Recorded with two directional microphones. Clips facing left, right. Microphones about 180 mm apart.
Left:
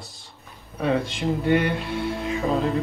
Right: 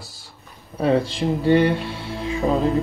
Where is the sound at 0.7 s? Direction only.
35° right (ahead or behind).